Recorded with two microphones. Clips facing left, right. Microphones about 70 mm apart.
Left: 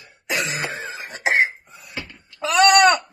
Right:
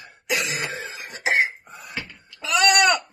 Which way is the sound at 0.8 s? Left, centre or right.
Left.